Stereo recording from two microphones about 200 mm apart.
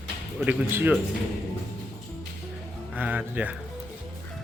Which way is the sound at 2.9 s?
10° right (ahead or behind).